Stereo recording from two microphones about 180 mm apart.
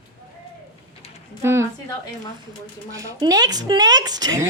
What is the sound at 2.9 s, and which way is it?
A woman's voice, 20° right (ahead or behind).